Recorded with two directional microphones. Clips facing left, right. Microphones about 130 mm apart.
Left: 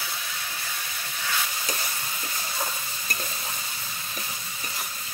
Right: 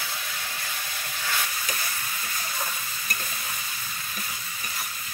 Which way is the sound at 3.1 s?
25° left (ahead or behind).